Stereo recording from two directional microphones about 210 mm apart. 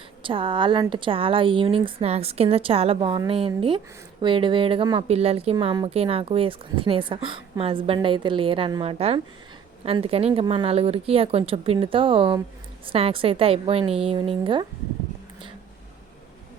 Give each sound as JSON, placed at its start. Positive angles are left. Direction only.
{"t": 0.2, "sound": "a woman's voice", "side_deg": -25}